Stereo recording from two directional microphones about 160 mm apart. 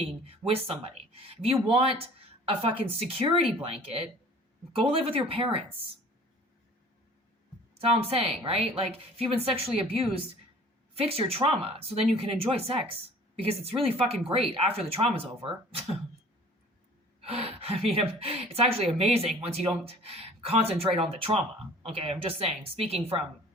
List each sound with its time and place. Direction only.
0.0 s speech: 40° right (ahead or behind)
7.8 s speech: 40° right (ahead or behind)
17.2 s gasp: 40° right (ahead or behind)
17.9 s speech: 35° right (ahead or behind)